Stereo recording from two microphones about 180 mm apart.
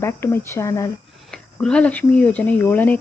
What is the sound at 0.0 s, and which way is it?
Speech, 15° left (ahead or behind).